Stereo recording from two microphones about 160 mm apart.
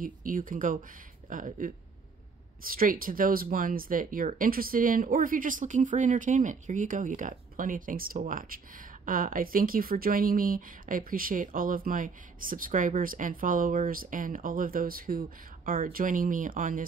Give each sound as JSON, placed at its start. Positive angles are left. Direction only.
{"t": 0.0, "sound": "speech", "side_deg": -55}